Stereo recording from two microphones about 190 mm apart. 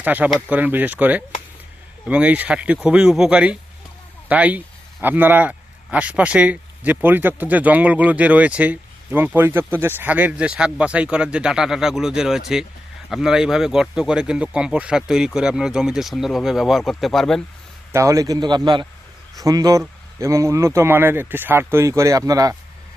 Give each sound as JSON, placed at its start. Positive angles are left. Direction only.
{"t": 0.0, "sound": "a man's voice", "side_deg": -10}
{"t": 17.9, "sound": "a man's voice", "side_deg": -15}